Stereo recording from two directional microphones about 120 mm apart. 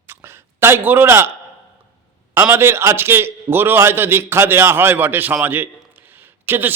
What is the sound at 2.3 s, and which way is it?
A man's voice, 20° right (ahead or behind).